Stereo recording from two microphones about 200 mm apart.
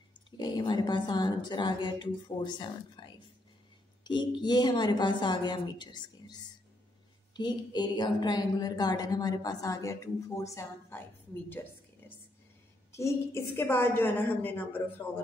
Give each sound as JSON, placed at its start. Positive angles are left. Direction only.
{"t": 0.4, "sound": "a woman's voice", "side_deg": 20}
{"t": 12.9, "sound": "a woman's voice", "side_deg": 15}